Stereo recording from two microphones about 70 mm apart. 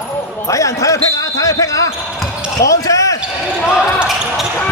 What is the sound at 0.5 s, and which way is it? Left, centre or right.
Speech, left.